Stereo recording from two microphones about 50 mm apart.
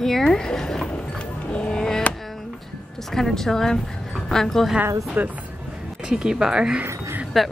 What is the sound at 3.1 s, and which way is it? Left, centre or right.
Speech, centre.